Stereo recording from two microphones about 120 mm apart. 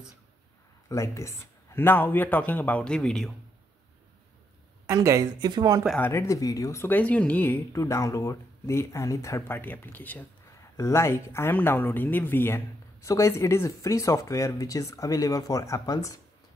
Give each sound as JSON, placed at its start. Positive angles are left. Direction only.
{"t": 0.8, "sound": "speech", "side_deg": 25}
{"t": 4.8, "sound": "speech", "side_deg": -25}
{"t": 5.9, "sound": "speech", "side_deg": 20}